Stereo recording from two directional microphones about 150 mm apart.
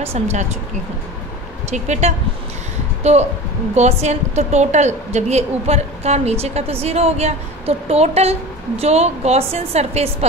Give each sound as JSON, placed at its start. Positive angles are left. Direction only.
{"t": 0.0, "sound": "a woman's voice", "side_deg": -45}
{"t": 1.7, "sound": "a woman's voice", "side_deg": -50}